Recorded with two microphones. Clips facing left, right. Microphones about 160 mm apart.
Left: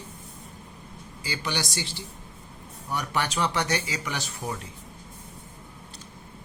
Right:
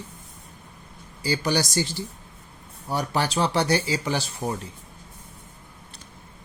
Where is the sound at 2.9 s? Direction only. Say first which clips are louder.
Right 4 dB; 30° right (ahead or behind).